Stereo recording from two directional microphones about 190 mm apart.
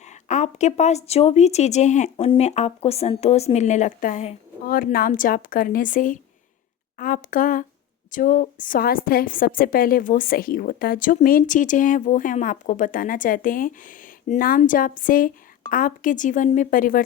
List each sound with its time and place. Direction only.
0.0 s a woman's voice: 40° left (ahead or behind)